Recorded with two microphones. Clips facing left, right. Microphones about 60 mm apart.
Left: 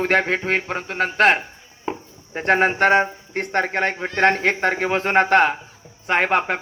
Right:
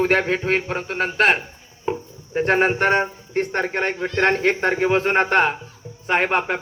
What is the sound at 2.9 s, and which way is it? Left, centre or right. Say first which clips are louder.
Speech: left 2 dB; centre.